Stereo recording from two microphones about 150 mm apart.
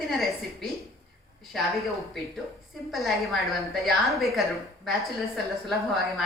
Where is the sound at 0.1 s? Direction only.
Centre (ahead or behind).